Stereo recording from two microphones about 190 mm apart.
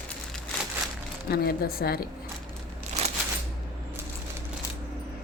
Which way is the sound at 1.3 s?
55° left (ahead or behind).